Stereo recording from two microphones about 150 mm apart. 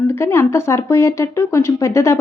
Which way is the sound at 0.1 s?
15° left (ahead or behind).